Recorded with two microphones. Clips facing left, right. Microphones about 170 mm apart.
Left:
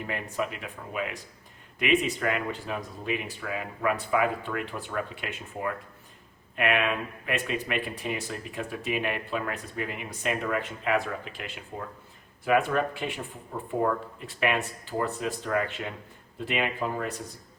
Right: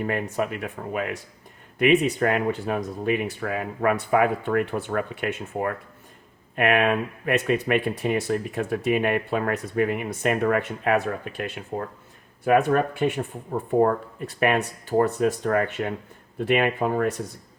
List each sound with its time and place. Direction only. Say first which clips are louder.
0.0 s speech: right 6 dB; 50° right (ahead or behind)
12.5 s speech: right 5 dB; 45° right (ahead or behind)